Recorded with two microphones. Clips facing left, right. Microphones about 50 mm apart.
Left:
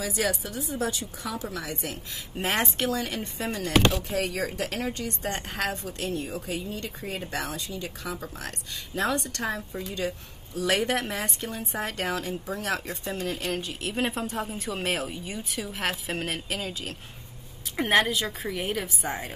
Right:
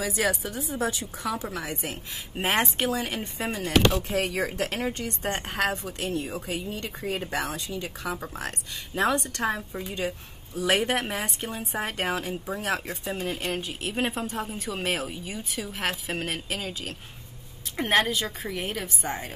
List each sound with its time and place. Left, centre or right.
0.0 s speech: centre
0.7 s a woman's voice: right; by 4.0 s centre
4.1 s a woman's voice: right
6.1 s speech: centre
6.4 s a woman's voice: right; by 19.3 s centre